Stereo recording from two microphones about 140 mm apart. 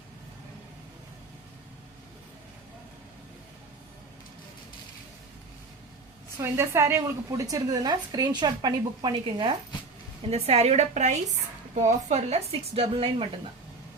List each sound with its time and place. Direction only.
6.4 s a woman's voice: 20° right (ahead or behind)
10.2 s a woman's voice: 50° right (ahead or behind)